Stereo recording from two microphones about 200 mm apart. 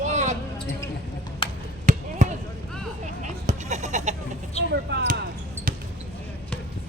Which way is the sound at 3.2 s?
35° right (ahead or behind).